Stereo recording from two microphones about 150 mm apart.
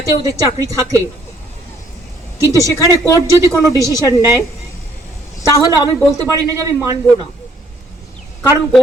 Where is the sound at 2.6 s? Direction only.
20° left (ahead or behind).